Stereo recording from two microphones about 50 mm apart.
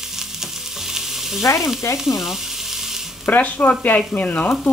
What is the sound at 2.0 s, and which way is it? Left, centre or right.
Speech, centre.